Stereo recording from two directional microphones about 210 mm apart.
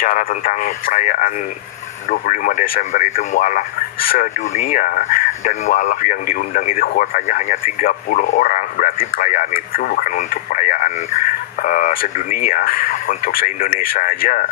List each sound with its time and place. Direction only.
0.0 s speech: 40° left (ahead or behind)